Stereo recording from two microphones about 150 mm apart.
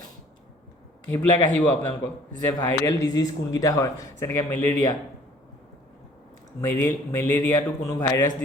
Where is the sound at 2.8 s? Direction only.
25° left (ahead or behind).